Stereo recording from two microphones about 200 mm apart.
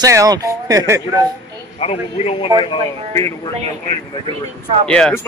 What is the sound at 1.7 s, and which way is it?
Speech, 30° left (ahead or behind).